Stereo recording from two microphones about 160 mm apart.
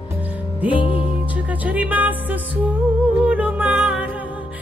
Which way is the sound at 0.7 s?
35° left (ahead or behind).